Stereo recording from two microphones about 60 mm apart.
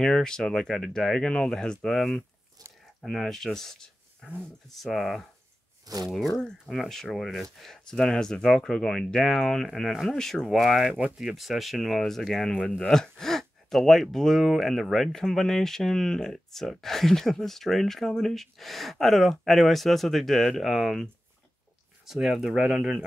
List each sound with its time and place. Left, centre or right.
0.0 s speech: centre
2.6 s a sound: right
3.0 s speech: centre
10.4 s speech: centre